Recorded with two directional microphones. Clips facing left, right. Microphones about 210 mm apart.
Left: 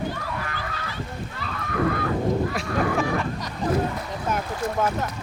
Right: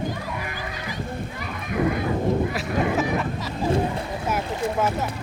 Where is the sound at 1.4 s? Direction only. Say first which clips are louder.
Even; 15° right (ahead or behind).